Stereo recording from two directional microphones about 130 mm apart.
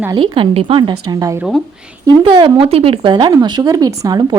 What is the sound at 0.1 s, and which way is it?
Speech, 40° right (ahead or behind).